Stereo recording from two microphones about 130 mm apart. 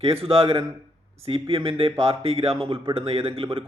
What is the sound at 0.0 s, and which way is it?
A man's voice, 45° right (ahead or behind).